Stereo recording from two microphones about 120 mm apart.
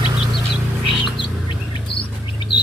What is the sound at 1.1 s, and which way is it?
Bird, 40° left (ahead or behind).